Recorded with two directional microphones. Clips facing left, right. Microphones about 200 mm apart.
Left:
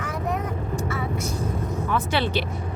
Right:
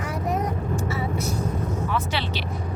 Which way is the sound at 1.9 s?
50° left (ahead or behind).